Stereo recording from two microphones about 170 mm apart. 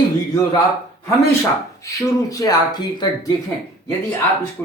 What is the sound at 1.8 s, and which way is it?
Speech, 20° left (ahead or behind).